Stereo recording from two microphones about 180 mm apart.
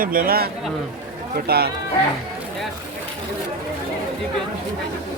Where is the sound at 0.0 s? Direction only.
50° right (ahead or behind).